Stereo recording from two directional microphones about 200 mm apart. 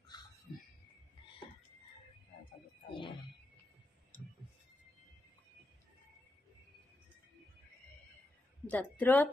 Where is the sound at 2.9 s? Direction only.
25° left (ahead or behind).